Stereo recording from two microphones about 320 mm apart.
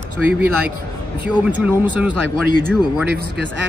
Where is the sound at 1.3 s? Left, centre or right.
Centre.